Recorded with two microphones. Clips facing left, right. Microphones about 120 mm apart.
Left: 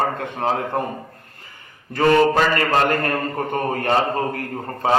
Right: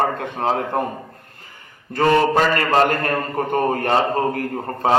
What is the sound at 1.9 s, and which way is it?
Speech, 30° right (ahead or behind).